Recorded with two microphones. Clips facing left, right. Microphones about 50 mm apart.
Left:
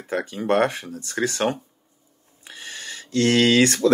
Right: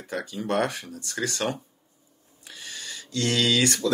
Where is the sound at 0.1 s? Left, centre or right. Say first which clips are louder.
Left 6 dB; left.